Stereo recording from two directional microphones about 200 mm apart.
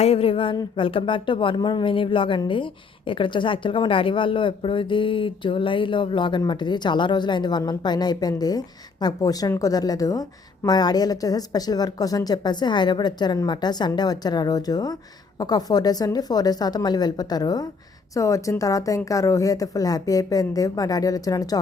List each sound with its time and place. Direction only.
0.0 s speech: 30° left (ahead or behind)